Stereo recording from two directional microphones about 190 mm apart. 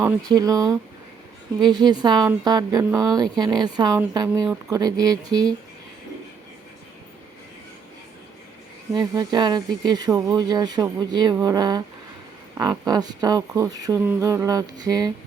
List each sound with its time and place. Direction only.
0.0 s speech: 20° right (ahead or behind)
8.9 s speech: 20° right (ahead or behind)
13.6 s a sound: 20° right (ahead or behind)